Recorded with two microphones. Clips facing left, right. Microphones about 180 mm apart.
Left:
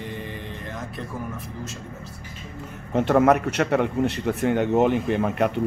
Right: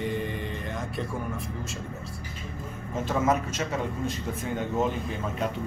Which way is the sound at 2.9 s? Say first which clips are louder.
Left 8 dB; 65° left (ahead or behind).